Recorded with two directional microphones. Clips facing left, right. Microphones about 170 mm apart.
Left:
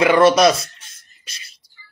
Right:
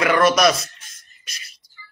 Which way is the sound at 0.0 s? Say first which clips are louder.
Left 4 dB; 30° left (ahead or behind).